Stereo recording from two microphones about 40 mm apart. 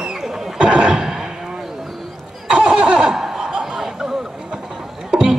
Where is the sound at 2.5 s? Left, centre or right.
Right.